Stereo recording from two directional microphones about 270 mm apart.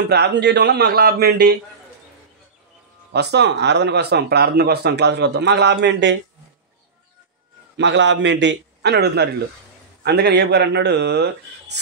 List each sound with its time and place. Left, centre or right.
0.1 s speech: right
3.1 s speech: right
7.7 s speech: right